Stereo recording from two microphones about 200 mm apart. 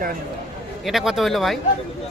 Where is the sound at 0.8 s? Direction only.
Centre (ahead or behind).